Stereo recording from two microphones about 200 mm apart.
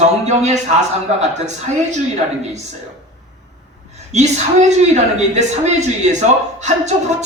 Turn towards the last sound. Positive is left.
turn(degrees=-35)  # may be behind; listen again after turning